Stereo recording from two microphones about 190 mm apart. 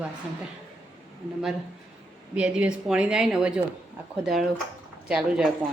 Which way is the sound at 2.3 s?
5° right (ahead or behind).